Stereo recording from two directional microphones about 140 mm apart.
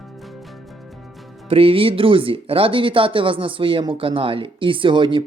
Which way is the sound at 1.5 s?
40° right (ahead or behind).